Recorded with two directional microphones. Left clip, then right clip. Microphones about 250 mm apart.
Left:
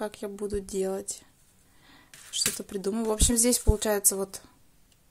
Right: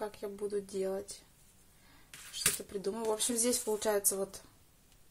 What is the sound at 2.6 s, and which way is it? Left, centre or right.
A woman's voice, left.